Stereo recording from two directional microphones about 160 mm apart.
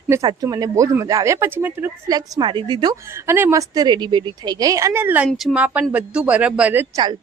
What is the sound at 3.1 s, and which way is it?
A woman's voice, 15° right (ahead or behind).